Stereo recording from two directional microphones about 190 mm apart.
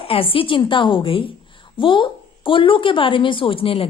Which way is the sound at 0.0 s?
30° left (ahead or behind).